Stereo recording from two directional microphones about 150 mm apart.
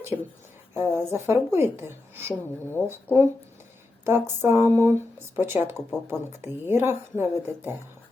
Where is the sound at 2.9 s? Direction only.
15° right (ahead or behind).